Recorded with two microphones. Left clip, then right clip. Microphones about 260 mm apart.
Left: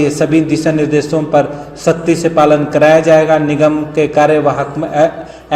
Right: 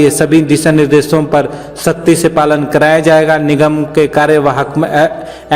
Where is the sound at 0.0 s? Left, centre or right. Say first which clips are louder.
Right 3 dB; right.